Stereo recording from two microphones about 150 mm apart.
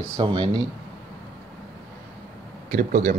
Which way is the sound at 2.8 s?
70° right (ahead or behind).